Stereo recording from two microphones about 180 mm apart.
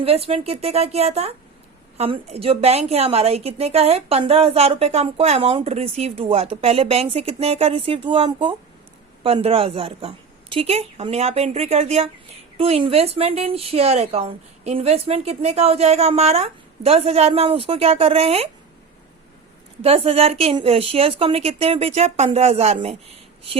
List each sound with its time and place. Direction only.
0.0 s a woman's voice: 30° right (ahead or behind)
19.8 s a woman's voice: 35° right (ahead or behind)